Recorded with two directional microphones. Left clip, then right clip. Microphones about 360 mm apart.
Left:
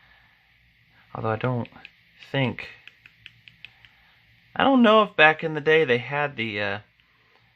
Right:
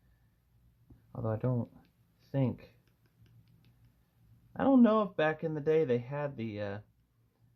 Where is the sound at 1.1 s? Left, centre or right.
Centre.